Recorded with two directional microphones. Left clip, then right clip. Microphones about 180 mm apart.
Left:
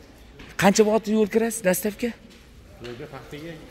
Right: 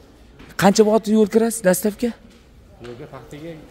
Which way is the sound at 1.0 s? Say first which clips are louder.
Right 5 dB; 50° right (ahead or behind).